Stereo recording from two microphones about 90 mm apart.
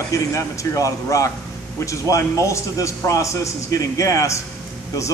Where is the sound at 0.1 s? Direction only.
35° left (ahead or behind).